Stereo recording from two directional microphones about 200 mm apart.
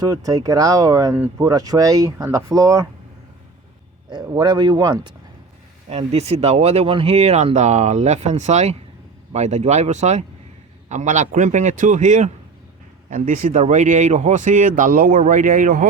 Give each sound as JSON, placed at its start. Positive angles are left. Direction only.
{"t": 0.0, "sound": "speech", "side_deg": -20}
{"t": 4.1, "sound": "speech", "side_deg": -20}
{"t": 5.9, "sound": "speech", "side_deg": -30}